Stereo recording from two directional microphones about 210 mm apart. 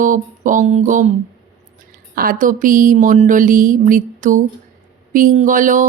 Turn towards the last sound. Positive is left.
turn(degrees=-40)  # may be behind; listen again after turning